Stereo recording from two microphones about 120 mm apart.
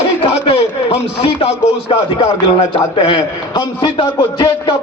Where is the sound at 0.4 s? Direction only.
50° left (ahead or behind).